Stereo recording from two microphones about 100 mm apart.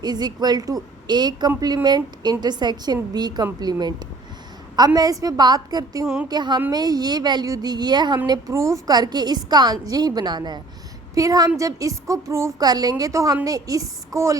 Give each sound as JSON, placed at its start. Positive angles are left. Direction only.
{"t": 0.0, "sound": "a woman's voice", "side_deg": -45}
{"t": 8.3, "sound": "a woman's voice", "side_deg": -35}
{"t": 8.9, "sound": "a woman's voice", "side_deg": -45}